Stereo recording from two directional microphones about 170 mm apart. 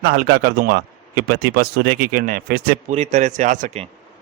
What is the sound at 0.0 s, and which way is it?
A man's voice, 65° right (ahead or behind).